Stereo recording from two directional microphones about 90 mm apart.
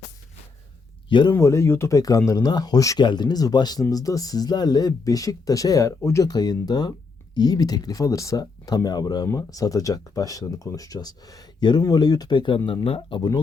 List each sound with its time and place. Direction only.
1.3 s speech: 35° left (ahead or behind)
2.0 s speech: 40° left (ahead or behind)
3.0 s speech: 55° left (ahead or behind); by 6.2 s 30° left (ahead or behind)
6.2 s speech: 45° left (ahead or behind); by 13.2 s 80° left